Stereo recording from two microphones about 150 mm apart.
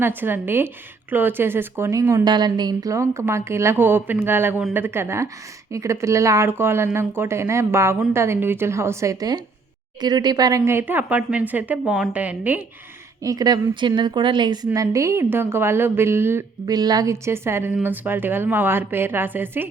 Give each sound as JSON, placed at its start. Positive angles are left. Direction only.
{"t": 0.0, "sound": "speech", "side_deg": -15}
{"t": 13.2, "sound": "a woman's voice", "side_deg": -25}